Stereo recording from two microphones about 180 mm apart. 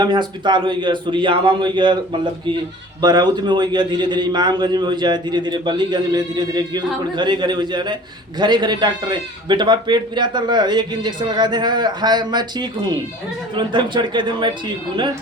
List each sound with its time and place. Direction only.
0.0 s a man's voice: 25° right (ahead or behind)
3.0 s a man's voice: 20° right (ahead or behind)